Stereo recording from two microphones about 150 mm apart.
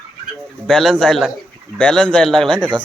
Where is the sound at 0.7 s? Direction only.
Centre (ahead or behind).